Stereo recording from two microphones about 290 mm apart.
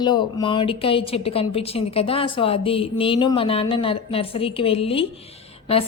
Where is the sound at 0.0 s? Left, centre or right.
Centre.